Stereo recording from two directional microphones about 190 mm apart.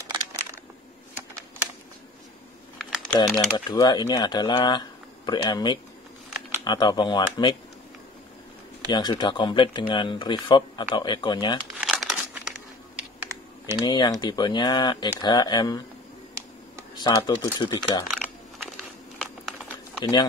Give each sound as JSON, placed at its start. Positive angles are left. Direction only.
{"t": 0.0, "sound": "crushing", "side_deg": -15}
{"t": 2.8, "sound": "typing", "side_deg": 5}
{"t": 3.5, "sound": "speech", "side_deg": 20}
{"t": 8.8, "sound": "speech", "side_deg": 25}
{"t": 11.8, "sound": "crumpling", "side_deg": 0}
{"t": 13.2, "sound": "typing", "side_deg": -15}
{"t": 13.7, "sound": "speech", "side_deg": 20}
{"t": 16.9, "sound": "speech", "side_deg": 20}
{"t": 19.1, "sound": "a sound", "side_deg": 5}